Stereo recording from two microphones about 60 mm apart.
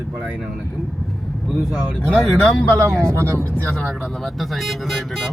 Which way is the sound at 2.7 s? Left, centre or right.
Right.